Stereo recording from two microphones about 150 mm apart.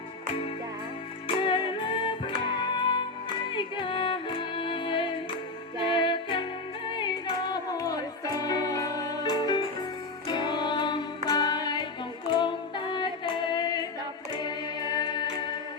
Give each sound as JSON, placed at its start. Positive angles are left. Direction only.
{"t": 1.4, "sound": "music", "side_deg": 30}
{"t": 12.3, "sound": "female singing", "side_deg": 30}
{"t": 14.4, "sound": "music", "side_deg": 25}